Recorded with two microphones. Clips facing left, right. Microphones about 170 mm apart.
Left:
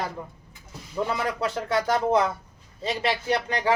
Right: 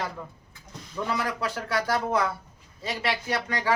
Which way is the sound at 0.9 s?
25° left (ahead or behind).